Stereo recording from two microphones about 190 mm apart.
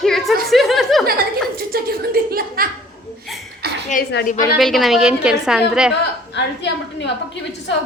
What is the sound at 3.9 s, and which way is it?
Speech, 40° left (ahead or behind).